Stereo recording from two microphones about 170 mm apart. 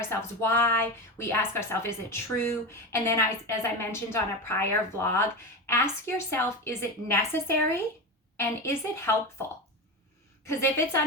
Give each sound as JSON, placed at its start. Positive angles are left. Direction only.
{"t": 0.1, "sound": "speech", "side_deg": 15}
{"t": 10.4, "sound": "speech", "side_deg": 15}